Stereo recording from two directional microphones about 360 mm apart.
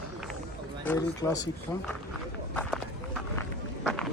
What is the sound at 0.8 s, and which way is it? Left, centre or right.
Speech, centre.